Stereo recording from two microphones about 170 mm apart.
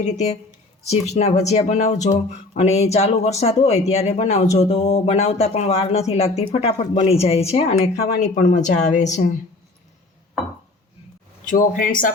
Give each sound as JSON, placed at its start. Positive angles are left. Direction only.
{"t": 0.0, "sound": "speech", "side_deg": 40}
{"t": 11.4, "sound": "speech", "side_deg": 50}